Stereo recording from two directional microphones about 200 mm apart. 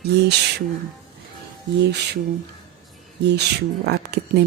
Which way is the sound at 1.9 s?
55° right (ahead or behind).